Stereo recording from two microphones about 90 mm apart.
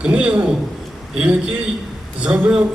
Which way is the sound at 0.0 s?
10° right (ahead or behind).